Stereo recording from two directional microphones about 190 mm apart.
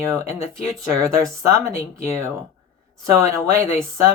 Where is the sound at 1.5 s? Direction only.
15° right (ahead or behind).